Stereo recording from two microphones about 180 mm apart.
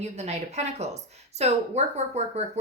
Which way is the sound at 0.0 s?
35° right (ahead or behind).